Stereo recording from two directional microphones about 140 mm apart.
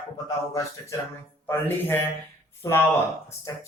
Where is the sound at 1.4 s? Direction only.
15° left (ahead or behind).